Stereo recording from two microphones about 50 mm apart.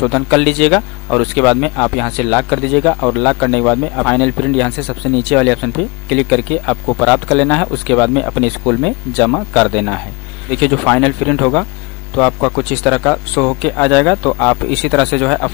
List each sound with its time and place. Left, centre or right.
0.0 s speech: centre